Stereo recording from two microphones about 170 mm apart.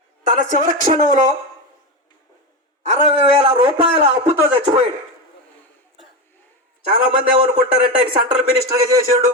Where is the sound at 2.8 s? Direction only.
35° right (ahead or behind).